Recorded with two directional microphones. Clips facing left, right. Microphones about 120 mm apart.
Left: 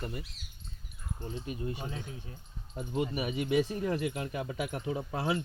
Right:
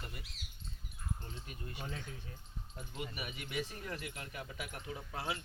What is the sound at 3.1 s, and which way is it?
Speech, 30° left (ahead or behind).